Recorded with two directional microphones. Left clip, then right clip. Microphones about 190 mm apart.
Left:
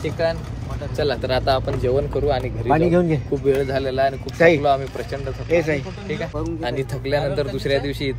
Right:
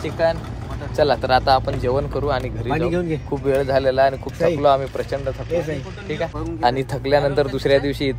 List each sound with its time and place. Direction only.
0.0 s speech: 5° right (ahead or behind)
0.9 s speech: 15° right (ahead or behind)
2.7 s speech: 40° left (ahead or behind)
3.4 s speech: 10° right (ahead or behind)
6.6 s speech: 20° right (ahead or behind)